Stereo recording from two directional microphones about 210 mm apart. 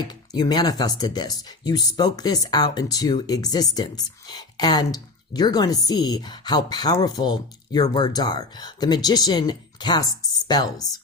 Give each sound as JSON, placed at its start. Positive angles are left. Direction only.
{"t": 0.0, "sound": "speech", "side_deg": 20}